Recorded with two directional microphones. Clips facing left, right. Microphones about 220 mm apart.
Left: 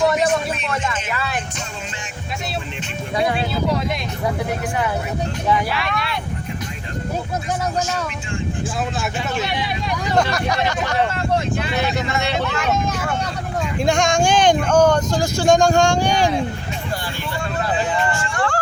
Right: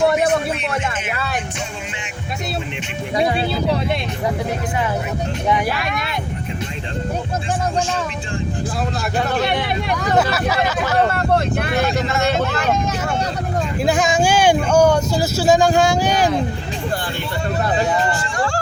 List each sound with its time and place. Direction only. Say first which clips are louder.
5.6 s speech: right 2 dB; 45° right (ahead or behind)
9.4 s speech: right 4 dB; 55° right (ahead or behind)
10.2 s speech: even; 5° right (ahead or behind)
11.1 s speech: right 3 dB; 60° right (ahead or behind)
12.3 s speech: right 3 dB; 40° right (ahead or behind)
13.7 s speech: even; 5° right (ahead or behind)
17.7 s a sound: right 2 dB; 40° right (ahead or behind)